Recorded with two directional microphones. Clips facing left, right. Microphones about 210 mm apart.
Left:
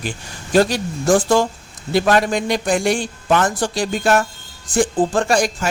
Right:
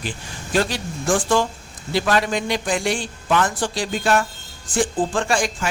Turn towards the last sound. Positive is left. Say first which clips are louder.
# left 4 dB
turn(degrees=40)  # may be behind; listen again after turning